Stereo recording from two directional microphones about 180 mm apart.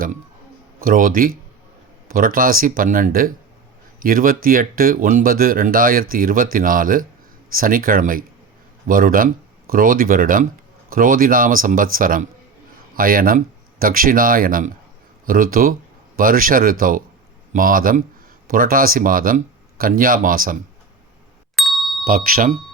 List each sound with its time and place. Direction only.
0.8 s speech: 50° right (ahead or behind)
21.5 s ding: centre (ahead or behind)
22.0 s speech: 55° right (ahead or behind)